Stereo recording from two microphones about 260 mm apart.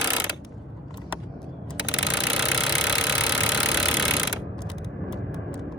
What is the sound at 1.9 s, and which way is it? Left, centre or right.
Engine, centre.